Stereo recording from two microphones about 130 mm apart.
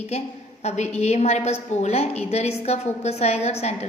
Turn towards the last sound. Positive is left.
turn(degrees=55)  # may be behind; listen again after turning